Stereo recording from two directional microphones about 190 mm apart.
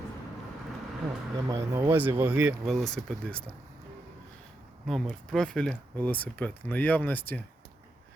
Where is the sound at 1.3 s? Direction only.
15° right (ahead or behind); by 3.5 s 5° left (ahead or behind).